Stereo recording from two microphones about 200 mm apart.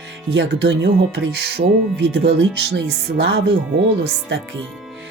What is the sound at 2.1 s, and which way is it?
Speech, 60° right (ahead or behind).